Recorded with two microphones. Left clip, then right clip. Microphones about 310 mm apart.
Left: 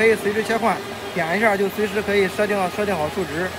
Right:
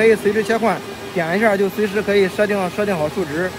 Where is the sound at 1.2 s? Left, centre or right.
Right.